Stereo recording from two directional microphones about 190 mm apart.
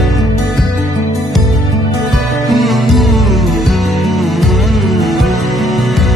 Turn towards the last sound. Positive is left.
turn(degrees=0)  # may be behind; listen again after turning